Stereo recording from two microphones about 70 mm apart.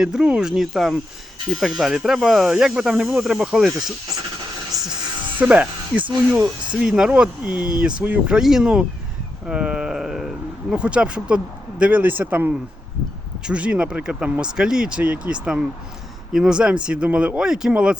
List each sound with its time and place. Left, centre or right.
0.0 s speech: centre
4.7 s music: right
5.4 s speech: right
6.8 s speech: centre
8.4 s speech: centre
9.5 s a sound: centre
10.8 s speech: centre